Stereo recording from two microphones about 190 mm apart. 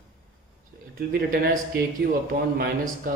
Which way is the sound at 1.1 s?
50° right (ahead or behind).